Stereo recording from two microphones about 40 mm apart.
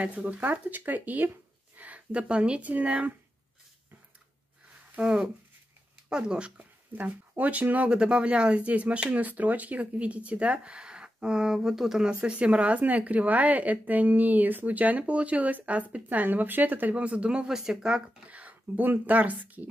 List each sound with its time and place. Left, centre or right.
0.0 s speech: right
2.6 s a woman's voice: right
5.0 s speech: right
7.0 s speech: right
7.9 s a woman's voice: right
9.2 s a woman's voice: right; by 11.5 s centre
11.5 s speech: centre
12.3 s a woman's voice: right
16.9 s a woman's voice: right
17.5 s speech: centre
18.3 s speech: right